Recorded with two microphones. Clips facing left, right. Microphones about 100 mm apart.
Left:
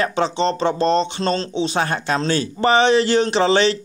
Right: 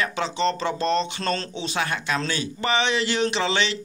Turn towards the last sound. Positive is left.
turn(degrees=40)  # may be behind; listen again after turning